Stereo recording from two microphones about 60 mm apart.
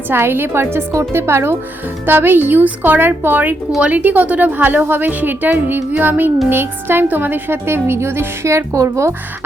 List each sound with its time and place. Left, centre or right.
0.1 s a woman's voice: right